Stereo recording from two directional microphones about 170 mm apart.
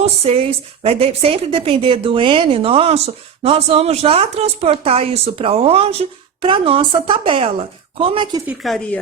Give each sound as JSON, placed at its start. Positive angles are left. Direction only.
{"t": 0.0, "sound": "a woman's voice", "side_deg": -35}
{"t": 8.4, "sound": "a woman's voice", "side_deg": 0}